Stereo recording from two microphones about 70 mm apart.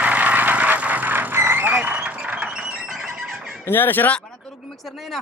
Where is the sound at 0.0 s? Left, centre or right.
Centre.